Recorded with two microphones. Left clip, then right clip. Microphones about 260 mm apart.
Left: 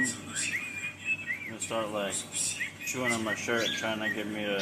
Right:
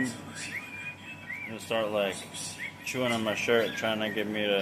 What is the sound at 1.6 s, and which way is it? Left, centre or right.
Speech, right.